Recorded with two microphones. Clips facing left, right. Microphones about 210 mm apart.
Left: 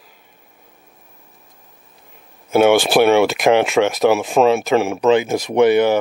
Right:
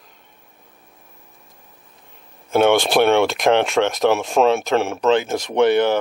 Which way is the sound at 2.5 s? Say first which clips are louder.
Left 3 dB; 5° left (ahead or behind).